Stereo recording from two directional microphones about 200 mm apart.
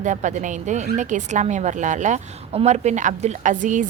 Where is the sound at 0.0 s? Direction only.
40° right (ahead or behind).